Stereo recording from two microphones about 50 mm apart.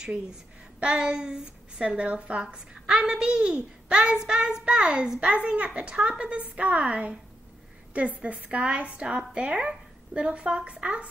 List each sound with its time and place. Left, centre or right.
0.7 s speech: right
2.4 s a child's voice: centre